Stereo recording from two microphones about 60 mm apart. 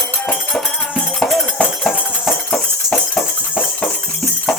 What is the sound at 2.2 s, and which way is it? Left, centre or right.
Horse, centre.